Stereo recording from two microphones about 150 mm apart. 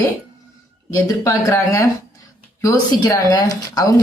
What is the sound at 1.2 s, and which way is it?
Speech, 20° left (ahead or behind).